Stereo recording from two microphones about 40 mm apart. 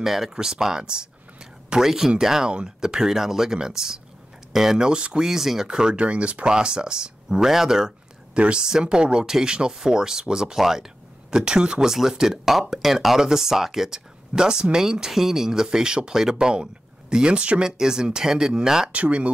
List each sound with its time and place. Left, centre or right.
0.0 s speech: centre
4.7 s speech: right
5.2 s speech: centre
5.7 s speech: centre
8.4 s speech: right
17.6 s speech: centre
18.9 s speech: right